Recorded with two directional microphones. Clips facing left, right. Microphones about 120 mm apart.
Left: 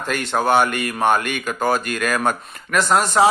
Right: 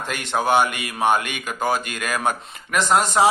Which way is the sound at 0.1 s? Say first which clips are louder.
Left 2 dB; 15° right (ahead or behind).